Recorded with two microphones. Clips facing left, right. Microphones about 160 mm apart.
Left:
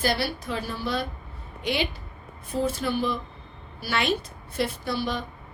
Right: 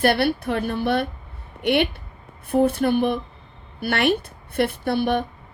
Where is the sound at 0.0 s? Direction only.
60° right (ahead or behind).